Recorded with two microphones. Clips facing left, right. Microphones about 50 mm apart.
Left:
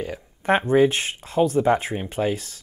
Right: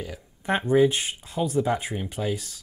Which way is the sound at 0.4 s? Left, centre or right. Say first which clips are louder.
Left 3 dB; left.